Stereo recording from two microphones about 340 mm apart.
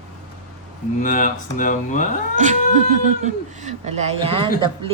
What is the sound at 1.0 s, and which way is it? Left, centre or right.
Speech, left.